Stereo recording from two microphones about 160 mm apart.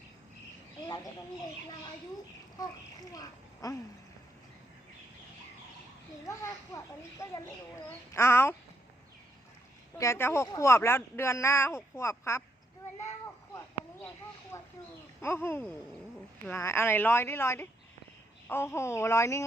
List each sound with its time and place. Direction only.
0.9 s a child's voice: 25° left (ahead or behind)
2.6 s a child's voice: 25° left (ahead or behind)
6.2 s a child's voice: 20° left (ahead or behind)
10.0 s speech: 15° left (ahead or behind)
13.0 s a sound: 20° left (ahead or behind)
14.5 s a child's voice: 20° left (ahead or behind)